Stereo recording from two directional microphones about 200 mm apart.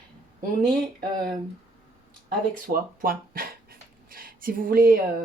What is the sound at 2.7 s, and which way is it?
Dog, 45° right (ahead or behind).